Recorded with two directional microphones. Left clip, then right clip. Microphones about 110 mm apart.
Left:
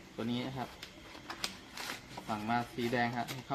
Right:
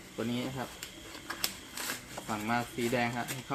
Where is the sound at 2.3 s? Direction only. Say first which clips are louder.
Right 2 dB; 15° left (ahead or behind).